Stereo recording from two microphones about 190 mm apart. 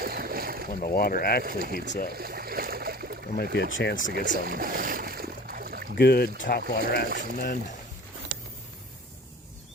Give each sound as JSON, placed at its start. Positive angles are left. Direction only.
{"t": 0.0, "sound": "boat", "side_deg": -50}
{"t": 0.8, "sound": "speech", "side_deg": 50}
{"t": 1.5, "sound": "speech", "side_deg": -50}
{"t": 2.0, "sound": "a sound", "side_deg": -55}
{"t": 3.3, "sound": "speech", "side_deg": 55}
{"t": 4.1, "sound": "a sound", "side_deg": -55}
{"t": 6.0, "sound": "speech", "side_deg": 55}